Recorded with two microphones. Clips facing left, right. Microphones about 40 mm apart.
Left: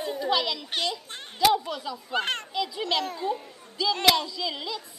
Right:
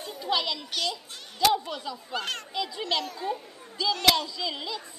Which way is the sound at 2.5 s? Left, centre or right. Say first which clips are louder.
Even; centre.